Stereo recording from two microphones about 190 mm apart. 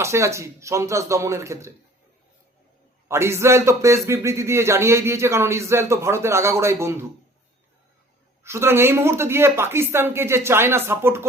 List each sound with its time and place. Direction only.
0.0 s a man's voice: 15° right (ahead or behind)
3.1 s a man's voice: 15° right (ahead or behind)
8.4 s a man's voice: 15° right (ahead or behind)